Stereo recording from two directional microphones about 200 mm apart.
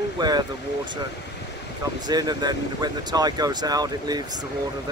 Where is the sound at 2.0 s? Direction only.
20° right (ahead or behind).